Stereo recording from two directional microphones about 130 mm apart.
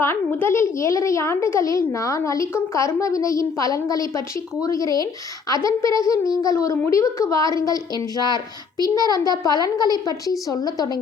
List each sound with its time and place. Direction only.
0.0 s a child's voice: 15° left (ahead or behind)